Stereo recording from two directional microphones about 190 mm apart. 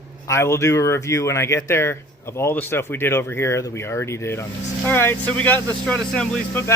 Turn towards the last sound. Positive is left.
turn(degrees=5)  # may be behind; listen again after turning